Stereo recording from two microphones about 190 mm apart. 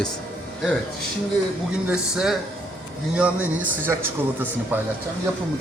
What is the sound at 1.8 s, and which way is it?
Speech, 5° right (ahead or behind).